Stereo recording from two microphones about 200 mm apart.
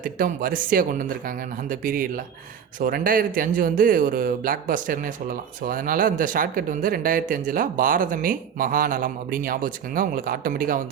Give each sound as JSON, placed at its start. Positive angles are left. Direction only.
{"t": 0.0, "sound": "speech", "side_deg": -45}